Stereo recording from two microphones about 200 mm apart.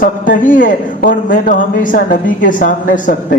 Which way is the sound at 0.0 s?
40° left (ahead or behind).